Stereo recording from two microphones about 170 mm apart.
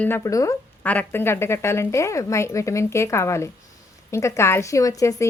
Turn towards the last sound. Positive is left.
turn(degrees=20)  # may be behind; listen again after turning